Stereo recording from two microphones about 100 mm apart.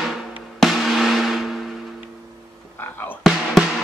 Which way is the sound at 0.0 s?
Centre (ahead or behind).